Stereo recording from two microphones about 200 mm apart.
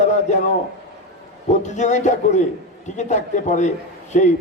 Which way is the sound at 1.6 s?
35° left (ahead or behind).